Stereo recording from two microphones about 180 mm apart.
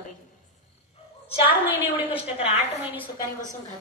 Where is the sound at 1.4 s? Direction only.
10° right (ahead or behind).